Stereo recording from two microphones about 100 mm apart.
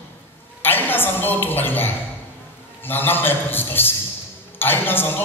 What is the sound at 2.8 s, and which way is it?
A man's voice, 20° left (ahead or behind).